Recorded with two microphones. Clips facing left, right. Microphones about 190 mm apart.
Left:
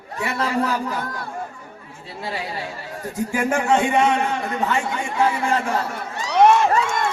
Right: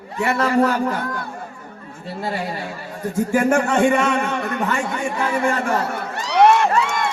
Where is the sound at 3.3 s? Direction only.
55° right (ahead or behind).